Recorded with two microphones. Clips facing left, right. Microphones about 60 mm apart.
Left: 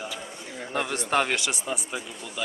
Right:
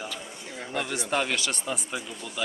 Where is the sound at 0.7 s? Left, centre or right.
Left.